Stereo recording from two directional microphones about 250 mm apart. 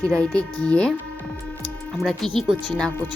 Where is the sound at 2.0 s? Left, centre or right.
Centre.